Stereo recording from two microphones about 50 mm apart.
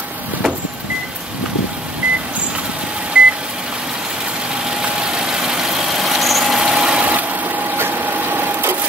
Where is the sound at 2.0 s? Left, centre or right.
Centre.